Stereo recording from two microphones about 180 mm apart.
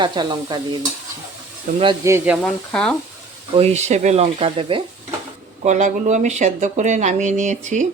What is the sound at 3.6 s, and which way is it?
Speech, 35° right (ahead or behind).